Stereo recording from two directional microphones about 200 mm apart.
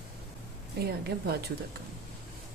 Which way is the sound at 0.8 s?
50° right (ahead or behind).